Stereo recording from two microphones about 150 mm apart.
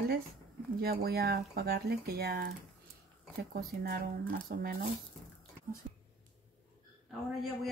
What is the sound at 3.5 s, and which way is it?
Speech, 90° right.